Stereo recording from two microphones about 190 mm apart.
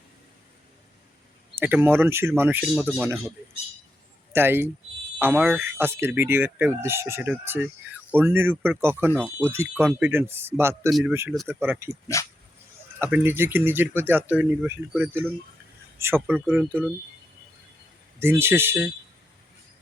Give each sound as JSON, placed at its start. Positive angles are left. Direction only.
{"t": 1.5, "sound": "speech", "side_deg": -10}
{"t": 4.3, "sound": "speech", "side_deg": -10}
{"t": 10.8, "sound": "speech", "side_deg": 0}
{"t": 11.1, "sound": "speech", "side_deg": -10}
{"t": 12.2, "sound": "speech", "side_deg": 15}
{"t": 13.0, "sound": "speech", "side_deg": -10}
{"t": 18.2, "sound": "speech", "side_deg": -10}